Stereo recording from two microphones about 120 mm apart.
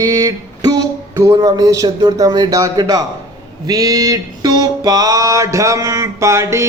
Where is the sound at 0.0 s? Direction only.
30° right (ahead or behind).